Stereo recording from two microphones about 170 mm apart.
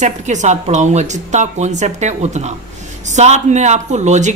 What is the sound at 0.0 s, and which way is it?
A woman's voice, 45° right (ahead or behind).